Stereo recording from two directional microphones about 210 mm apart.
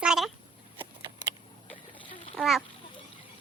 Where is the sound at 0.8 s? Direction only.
15° right (ahead or behind).